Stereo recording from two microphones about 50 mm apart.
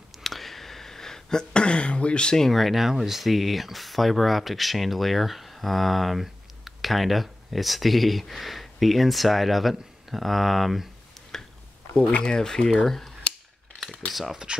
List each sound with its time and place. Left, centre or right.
0.2 s a sound: centre
2.5 s speech: centre
11.9 s speech: left
12.4 s speech: centre
14.1 s speech: centre